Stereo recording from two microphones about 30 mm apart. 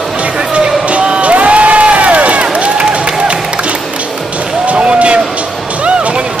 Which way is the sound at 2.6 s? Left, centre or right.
Right.